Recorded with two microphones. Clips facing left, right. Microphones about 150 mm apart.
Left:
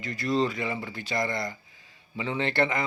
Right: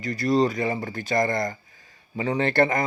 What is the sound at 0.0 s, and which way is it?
A man's voice, 40° right (ahead or behind).